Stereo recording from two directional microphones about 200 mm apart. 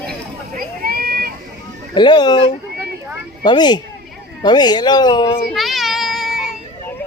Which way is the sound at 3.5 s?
20° left (ahead or behind).